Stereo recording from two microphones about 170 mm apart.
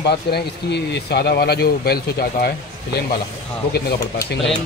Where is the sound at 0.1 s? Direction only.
80° left.